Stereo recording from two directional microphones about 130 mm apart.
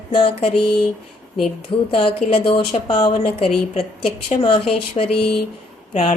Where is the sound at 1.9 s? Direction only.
45° left (ahead or behind).